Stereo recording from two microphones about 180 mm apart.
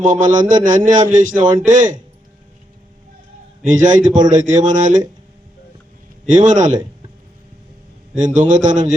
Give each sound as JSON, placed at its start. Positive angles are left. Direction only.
{"t": 0.0, "sound": "a man's voice", "side_deg": -45}
{"t": 3.6, "sound": "a man's voice", "side_deg": -45}
{"t": 6.2, "sound": "a man's voice", "side_deg": -45}
{"t": 8.1, "sound": "a man's voice", "side_deg": -45}